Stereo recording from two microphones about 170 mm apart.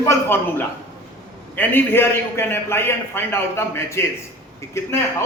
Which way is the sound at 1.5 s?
10° left (ahead or behind).